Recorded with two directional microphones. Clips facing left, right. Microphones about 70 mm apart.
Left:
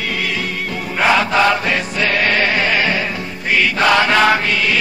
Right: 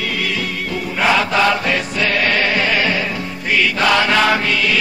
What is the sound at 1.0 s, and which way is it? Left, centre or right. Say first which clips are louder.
Chant: left 1 dB; left.